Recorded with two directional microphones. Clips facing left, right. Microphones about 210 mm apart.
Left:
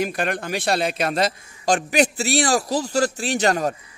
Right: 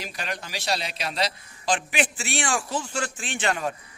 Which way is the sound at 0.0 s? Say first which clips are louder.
Left 10 dB; 55° left (ahead or behind).